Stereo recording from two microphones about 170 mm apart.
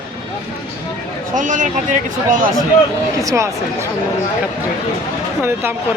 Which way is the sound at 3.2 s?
20° right (ahead or behind).